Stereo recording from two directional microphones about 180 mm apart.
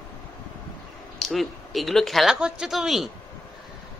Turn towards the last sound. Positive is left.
turn(degrees=0)  # may be behind; listen again after turning